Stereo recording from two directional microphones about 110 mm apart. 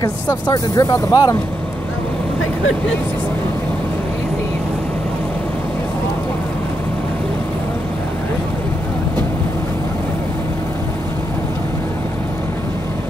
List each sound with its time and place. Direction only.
0.0 s speech: 35° left (ahead or behind)